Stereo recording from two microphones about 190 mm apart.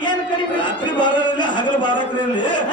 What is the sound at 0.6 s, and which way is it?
Speech, 25° left (ahead or behind).